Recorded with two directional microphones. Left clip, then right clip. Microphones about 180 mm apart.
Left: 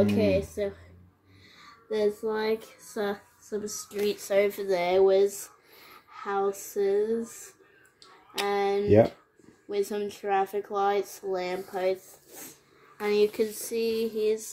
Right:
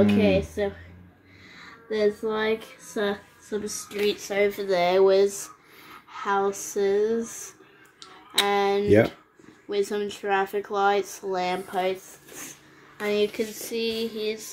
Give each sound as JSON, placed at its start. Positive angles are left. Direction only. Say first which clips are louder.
{"t": 0.0, "sound": "a woman's voice", "louder": "right 3 dB", "side_deg": 5}
{"t": 2.0, "sound": "speech", "louder": "right 3 dB", "side_deg": 15}
{"t": 4.8, "sound": "speech", "louder": "right 2 dB", "side_deg": 15}
{"t": 13.0, "sound": "a sound", "louder": "even", "side_deg": 70}